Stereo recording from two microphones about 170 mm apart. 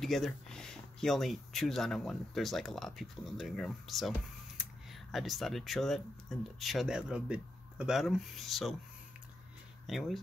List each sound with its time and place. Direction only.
0.0 s speech: centre (ahead or behind)
9.8 s speech: centre (ahead or behind)